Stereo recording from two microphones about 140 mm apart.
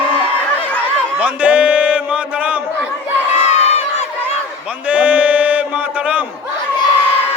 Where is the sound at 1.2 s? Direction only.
10° right (ahead or behind).